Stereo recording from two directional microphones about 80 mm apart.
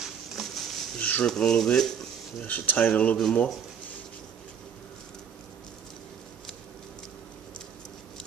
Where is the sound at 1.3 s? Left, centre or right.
Centre.